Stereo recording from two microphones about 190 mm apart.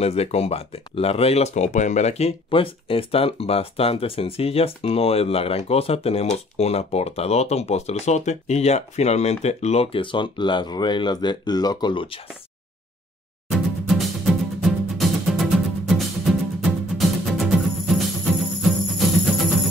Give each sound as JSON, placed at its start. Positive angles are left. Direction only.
{"t": 0.0, "sound": "speech", "side_deg": 35}
{"t": 13.5, "sound": "music", "side_deg": 0}